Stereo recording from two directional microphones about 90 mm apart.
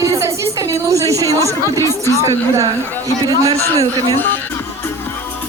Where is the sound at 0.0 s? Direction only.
35° right (ahead or behind).